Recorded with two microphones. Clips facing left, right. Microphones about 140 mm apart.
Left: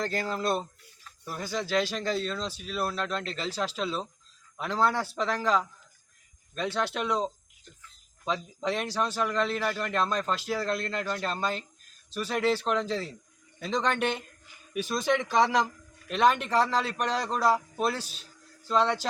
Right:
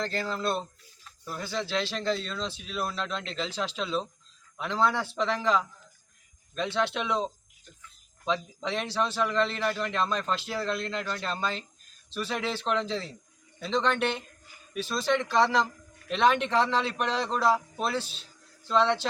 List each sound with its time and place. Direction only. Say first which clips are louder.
0.0 s a man's voice: left 1 dB; 10° left (ahead or behind)
16.0 s a man's voice: even; 5° left (ahead or behind)
18.0 s a man's voice: right 1 dB; 45° left (ahead or behind)
18.7 s speech: right 1 dB; 5° left (ahead or behind)